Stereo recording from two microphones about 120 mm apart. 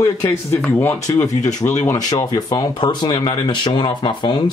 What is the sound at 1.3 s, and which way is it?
Speech, 80° left.